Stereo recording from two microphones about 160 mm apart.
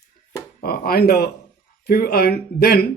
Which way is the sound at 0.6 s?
70° left (ahead or behind).